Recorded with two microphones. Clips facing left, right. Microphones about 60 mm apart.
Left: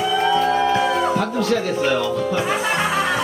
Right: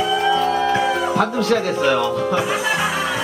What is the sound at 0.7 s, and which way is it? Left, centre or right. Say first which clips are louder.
Music: even; centre.